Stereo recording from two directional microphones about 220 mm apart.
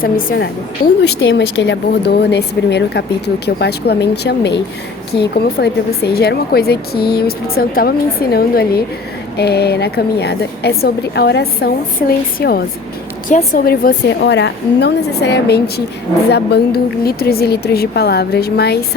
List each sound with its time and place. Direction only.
0.0 s a woman's voice: 40° left (ahead or behind)
1.0 s speech: 55° left (ahead or behind)